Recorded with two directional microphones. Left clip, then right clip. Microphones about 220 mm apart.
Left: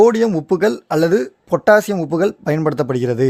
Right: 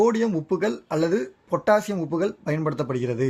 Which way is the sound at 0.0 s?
50° left (ahead or behind).